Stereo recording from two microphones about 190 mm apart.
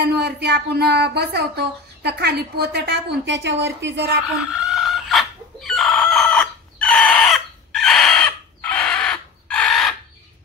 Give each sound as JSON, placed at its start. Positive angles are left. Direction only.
{"t": 0.0, "sound": "speech", "side_deg": -60}
{"t": 4.5, "sound": "chicken", "side_deg": 0}